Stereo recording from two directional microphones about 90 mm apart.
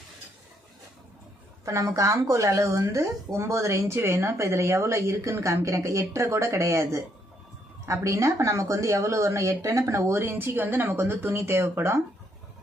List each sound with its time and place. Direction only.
1.6 s speech: 35° right (ahead or behind)